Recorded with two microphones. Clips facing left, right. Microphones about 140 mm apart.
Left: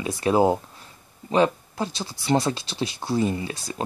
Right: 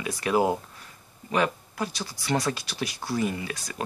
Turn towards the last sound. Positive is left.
turn(degrees=30)  # may be behind; listen again after turning